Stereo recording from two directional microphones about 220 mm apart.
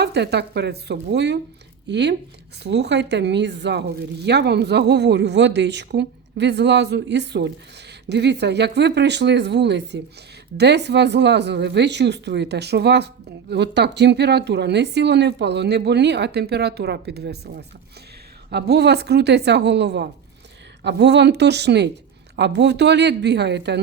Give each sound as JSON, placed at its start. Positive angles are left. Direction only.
{"t": 0.0, "sound": "speech", "side_deg": -50}